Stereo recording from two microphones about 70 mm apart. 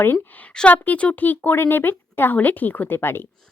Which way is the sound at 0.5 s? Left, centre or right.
Centre.